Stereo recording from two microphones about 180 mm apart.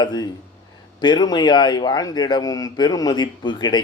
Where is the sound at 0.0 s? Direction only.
25° left (ahead or behind).